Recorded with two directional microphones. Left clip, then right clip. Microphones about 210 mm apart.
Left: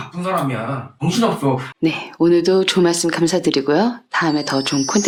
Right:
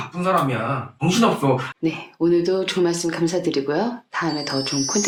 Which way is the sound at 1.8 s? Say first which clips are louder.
Left 6 dB; 40° left (ahead or behind).